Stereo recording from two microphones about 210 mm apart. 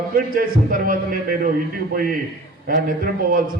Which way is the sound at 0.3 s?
40° right (ahead or behind).